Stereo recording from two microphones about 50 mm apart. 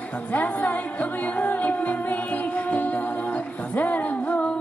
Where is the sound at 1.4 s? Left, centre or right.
Left.